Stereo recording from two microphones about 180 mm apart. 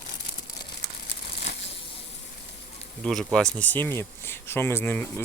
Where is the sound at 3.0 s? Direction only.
5° left (ahead or behind).